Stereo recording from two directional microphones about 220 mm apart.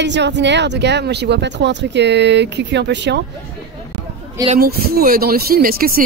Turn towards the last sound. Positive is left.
turn(degrees=-40)  # may be behind; listen again after turning